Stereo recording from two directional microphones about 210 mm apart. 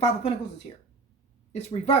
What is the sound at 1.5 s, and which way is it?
Speech, 30° left (ahead or behind).